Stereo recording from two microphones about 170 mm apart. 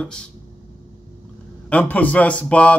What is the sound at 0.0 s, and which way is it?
Speech, 5° left (ahead or behind).